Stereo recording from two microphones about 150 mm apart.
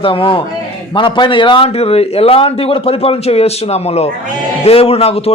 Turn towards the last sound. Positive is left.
turn(degrees=40)  # may be behind; listen again after turning